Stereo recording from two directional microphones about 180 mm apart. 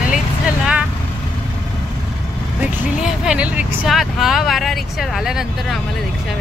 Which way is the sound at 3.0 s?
5° right (ahead or behind).